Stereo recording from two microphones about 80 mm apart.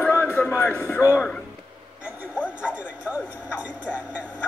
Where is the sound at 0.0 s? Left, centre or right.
Left.